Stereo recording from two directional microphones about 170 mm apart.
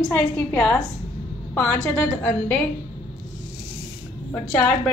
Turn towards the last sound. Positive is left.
turn(degrees=10)  # may be behind; listen again after turning